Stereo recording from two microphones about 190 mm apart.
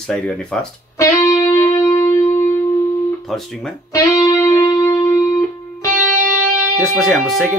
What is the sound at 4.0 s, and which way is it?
Music, 15° left (ahead or behind).